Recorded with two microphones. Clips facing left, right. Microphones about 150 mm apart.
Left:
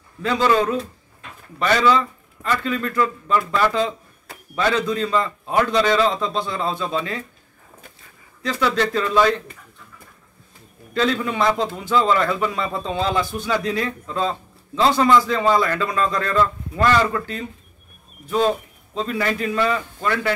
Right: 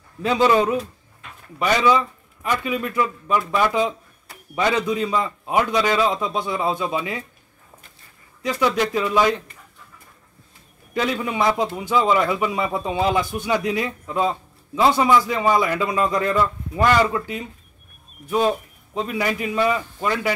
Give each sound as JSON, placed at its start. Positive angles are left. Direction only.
{"t": 0.2, "sound": "a man's voice", "side_deg": -15}
{"t": 1.9, "sound": "a man's voice", "side_deg": -15}
{"t": 8.4, "sound": "a man's voice", "side_deg": -15}
{"t": 10.9, "sound": "a man's voice", "side_deg": -15}